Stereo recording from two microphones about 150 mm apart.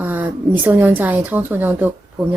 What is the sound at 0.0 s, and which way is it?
Speech, 10° right (ahead or behind).